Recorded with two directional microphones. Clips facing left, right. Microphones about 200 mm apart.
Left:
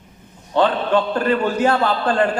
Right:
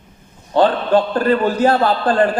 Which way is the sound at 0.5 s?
35° right (ahead or behind).